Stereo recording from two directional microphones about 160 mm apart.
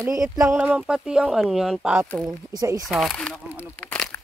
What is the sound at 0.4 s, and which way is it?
Speech, 15° right (ahead or behind).